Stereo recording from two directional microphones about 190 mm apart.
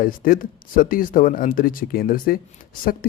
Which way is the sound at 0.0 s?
45° left (ahead or behind).